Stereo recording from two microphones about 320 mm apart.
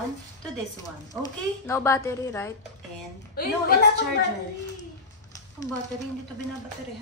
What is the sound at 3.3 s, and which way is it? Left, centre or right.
Speech, left.